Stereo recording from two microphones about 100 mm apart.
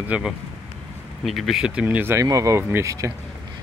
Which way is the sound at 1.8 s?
20° right (ahead or behind).